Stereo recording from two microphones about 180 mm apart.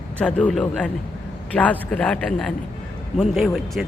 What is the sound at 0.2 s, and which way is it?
A man's voice, 5° left (ahead or behind).